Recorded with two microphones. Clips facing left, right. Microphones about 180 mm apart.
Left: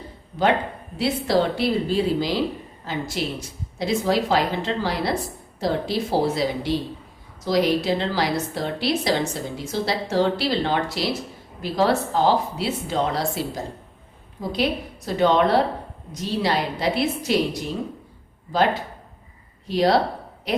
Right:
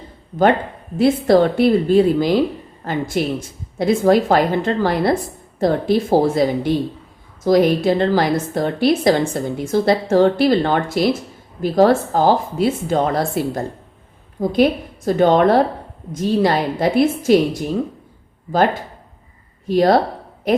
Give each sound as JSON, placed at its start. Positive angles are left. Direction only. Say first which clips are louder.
{"t": 0.9, "sound": "a woman's voice", "louder": "right 8 dB", "side_deg": -50}